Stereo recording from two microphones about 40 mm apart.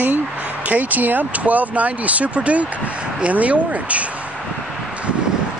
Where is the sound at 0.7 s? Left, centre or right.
Right.